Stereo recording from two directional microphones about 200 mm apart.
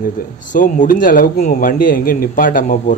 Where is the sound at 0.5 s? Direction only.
40° left (ahead or behind).